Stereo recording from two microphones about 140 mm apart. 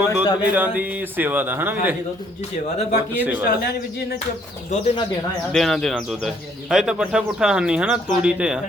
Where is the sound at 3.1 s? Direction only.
10° right (ahead or behind).